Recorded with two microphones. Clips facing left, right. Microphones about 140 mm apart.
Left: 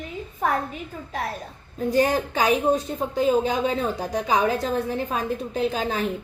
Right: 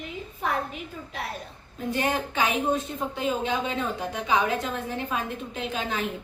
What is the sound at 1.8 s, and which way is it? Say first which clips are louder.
Speech: left 6 dB; 35° left (ahead or behind).